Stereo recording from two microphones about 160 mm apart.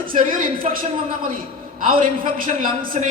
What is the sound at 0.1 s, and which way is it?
Speech, 60° right (ahead or behind).